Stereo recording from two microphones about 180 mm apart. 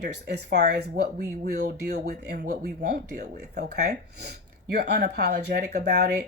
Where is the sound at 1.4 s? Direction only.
50° right (ahead or behind).